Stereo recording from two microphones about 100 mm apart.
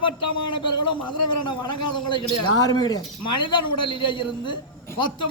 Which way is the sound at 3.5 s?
55° left (ahead or behind).